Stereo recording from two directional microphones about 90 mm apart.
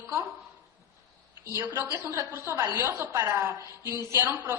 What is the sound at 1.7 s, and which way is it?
A woman's voice, 20° right (ahead or behind).